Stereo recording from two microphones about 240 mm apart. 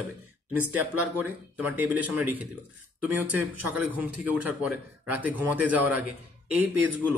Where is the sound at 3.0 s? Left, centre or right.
Right.